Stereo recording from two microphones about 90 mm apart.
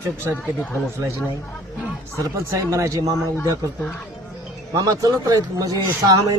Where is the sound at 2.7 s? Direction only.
40° right (ahead or behind).